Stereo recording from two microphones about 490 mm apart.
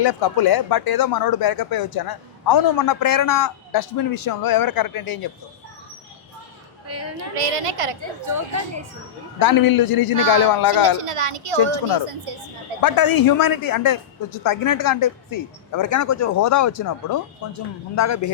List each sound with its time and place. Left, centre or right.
0.0 s speech: left
6.8 s a woman's voice: right
7.3 s a woman's voice: right
8.3 s speech: right
9.4 s speech: left
11.0 s a woman's voice: right
12.8 s speech: left